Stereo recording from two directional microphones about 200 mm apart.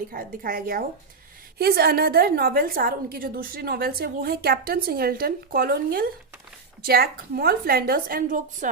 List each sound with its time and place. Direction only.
0.1 s a woman's voice: 45° right (ahead or behind)